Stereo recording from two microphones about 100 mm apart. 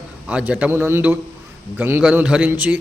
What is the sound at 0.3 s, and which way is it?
Speech, 10° right (ahead or behind).